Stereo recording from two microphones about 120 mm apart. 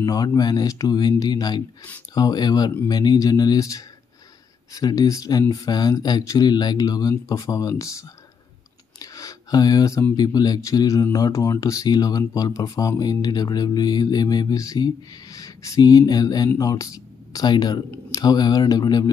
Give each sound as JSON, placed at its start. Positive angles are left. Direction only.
{"t": 0.0, "sound": "speech", "side_deg": 30}
{"t": 9.0, "sound": "a sound", "side_deg": 30}
{"t": 10.1, "sound": "speech", "side_deg": 35}